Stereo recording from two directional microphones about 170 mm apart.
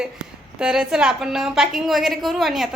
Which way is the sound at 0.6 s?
5° right (ahead or behind).